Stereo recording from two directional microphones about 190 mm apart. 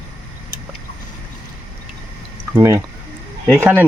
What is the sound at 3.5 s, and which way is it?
Speech, 10° right (ahead or behind).